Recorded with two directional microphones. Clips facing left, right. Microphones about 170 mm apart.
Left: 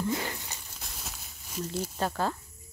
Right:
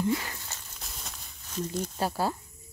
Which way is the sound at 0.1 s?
25° left (ahead or behind).